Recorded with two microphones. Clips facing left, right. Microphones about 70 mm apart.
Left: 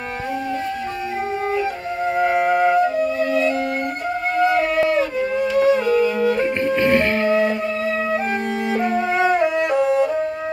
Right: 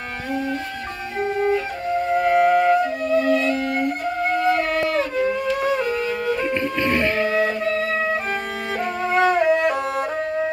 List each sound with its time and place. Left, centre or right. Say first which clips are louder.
2.0 s music: even; centre
6.4 s music: left 4 dB; left
6.9 s music: even; left
8.9 s music: right 2 dB; centre